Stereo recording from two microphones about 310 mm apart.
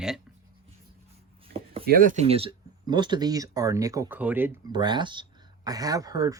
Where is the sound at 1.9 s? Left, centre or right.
Right.